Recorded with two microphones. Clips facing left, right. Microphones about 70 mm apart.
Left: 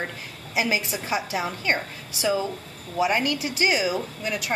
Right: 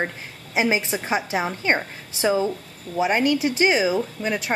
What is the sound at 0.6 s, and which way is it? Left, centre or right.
A woman's voice, right.